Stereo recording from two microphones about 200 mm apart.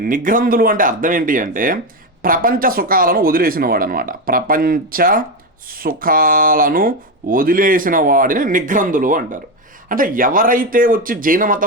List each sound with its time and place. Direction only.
0.0 s speech: 45° right (ahead or behind)